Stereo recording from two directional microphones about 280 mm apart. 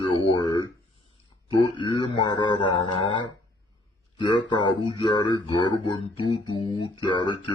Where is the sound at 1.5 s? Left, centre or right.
Centre.